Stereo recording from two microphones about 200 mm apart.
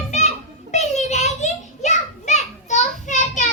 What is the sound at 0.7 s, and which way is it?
Children playing, 35° left (ahead or behind).